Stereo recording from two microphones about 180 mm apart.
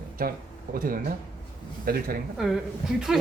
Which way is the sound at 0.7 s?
50° right (ahead or behind).